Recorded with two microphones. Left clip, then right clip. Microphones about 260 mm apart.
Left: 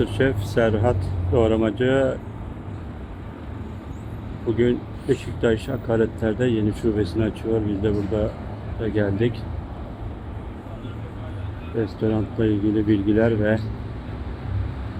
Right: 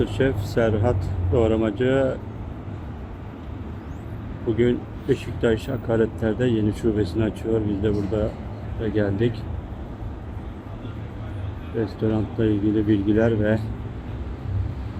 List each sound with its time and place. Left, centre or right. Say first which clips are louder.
0.0 s speech: left 1 dB; centre
4.5 s speech: even; centre
12.0 s speech: even; centre